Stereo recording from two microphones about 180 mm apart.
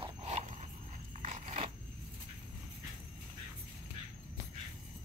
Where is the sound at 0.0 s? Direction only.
35° right (ahead or behind).